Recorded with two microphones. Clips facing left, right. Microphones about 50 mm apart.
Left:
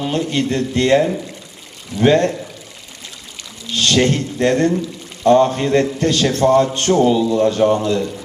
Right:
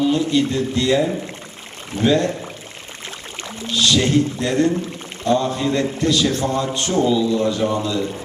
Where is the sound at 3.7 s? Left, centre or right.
Left.